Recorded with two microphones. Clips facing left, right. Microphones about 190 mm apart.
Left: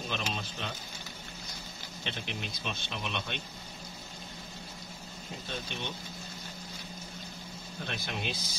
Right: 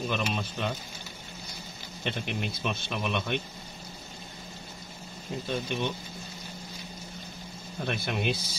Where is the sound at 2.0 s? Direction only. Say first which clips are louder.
Right 7 dB; 55° right (ahead or behind).